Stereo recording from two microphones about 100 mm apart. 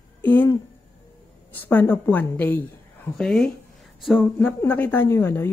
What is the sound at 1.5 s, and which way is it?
Speech, 20° left (ahead or behind).